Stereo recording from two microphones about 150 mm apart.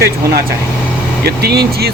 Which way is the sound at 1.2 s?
90° right.